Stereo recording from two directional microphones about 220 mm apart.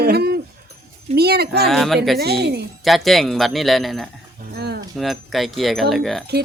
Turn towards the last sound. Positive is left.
turn(degrees=0)  # may be behind; listen again after turning